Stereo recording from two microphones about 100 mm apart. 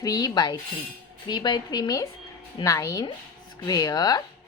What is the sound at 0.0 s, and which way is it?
Speech, 40° left (ahead or behind).